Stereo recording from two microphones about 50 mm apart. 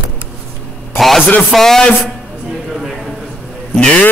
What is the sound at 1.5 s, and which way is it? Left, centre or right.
Music, centre.